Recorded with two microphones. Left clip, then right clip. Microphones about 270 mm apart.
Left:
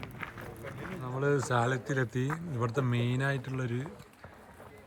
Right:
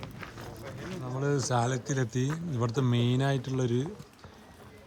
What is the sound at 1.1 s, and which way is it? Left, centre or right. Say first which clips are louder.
Speech: even; centre.